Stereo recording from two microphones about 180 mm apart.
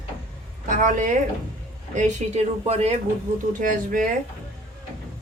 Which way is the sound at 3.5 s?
50° right (ahead or behind).